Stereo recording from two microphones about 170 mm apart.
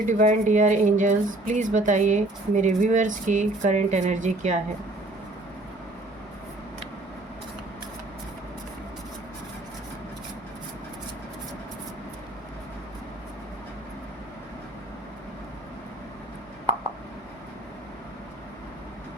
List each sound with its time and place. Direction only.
0.0 s speech: 50° right (ahead or behind)